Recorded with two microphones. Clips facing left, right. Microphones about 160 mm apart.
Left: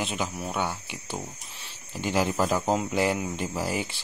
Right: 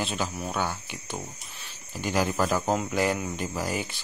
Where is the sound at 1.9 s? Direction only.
25° left (ahead or behind).